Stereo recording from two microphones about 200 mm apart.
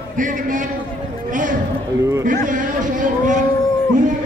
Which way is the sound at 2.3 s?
40° right (ahead or behind).